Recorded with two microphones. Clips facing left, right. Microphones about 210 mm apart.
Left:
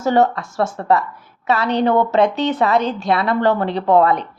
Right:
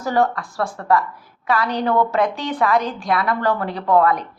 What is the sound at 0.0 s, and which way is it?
A woman's voice, 25° left (ahead or behind).